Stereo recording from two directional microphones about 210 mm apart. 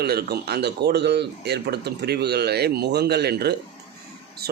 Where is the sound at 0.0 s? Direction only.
50° right (ahead or behind).